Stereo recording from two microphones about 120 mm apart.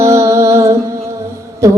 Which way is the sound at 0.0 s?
25° right (ahead or behind).